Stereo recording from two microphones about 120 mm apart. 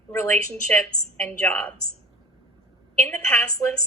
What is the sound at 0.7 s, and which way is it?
A woman's voice, 15° left (ahead or behind).